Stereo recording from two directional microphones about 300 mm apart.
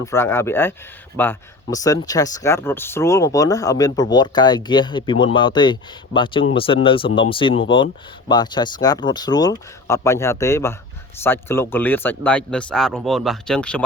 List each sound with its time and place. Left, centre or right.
0.0 s speech: centre